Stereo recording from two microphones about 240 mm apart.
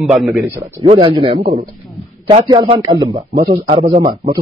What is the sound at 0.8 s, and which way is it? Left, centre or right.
A man's voice, right.